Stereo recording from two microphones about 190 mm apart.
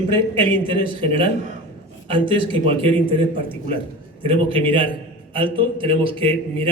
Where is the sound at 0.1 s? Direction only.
25° right (ahead or behind).